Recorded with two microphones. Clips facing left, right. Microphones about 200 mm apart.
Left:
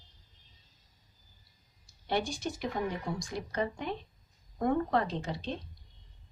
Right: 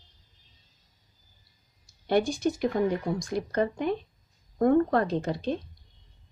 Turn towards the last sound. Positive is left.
turn(degrees=-50)  # may be behind; listen again after turning